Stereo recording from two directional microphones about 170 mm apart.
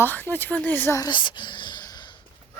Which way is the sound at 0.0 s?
10° left (ahead or behind).